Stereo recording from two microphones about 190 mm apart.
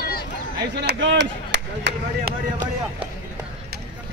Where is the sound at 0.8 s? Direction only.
65° right (ahead or behind).